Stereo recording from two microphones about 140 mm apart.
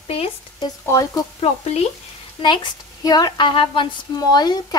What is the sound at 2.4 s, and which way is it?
Speech, 45° left (ahead or behind).